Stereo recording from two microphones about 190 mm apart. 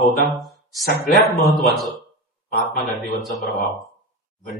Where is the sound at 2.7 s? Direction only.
55° left (ahead or behind).